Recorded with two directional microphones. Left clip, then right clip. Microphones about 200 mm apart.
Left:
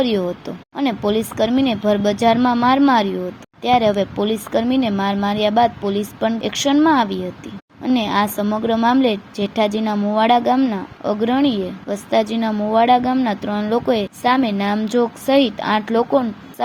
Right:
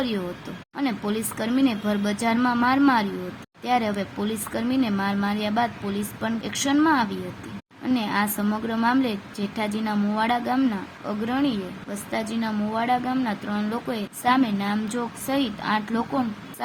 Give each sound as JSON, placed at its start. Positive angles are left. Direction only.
{"t": 0.8, "sound": "a woman's voice", "side_deg": 20}